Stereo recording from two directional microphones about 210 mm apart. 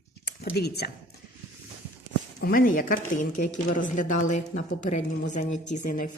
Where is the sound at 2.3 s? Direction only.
45° left (ahead or behind).